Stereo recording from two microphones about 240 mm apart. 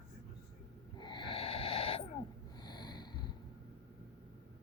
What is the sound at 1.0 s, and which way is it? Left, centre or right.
Wheeze, centre.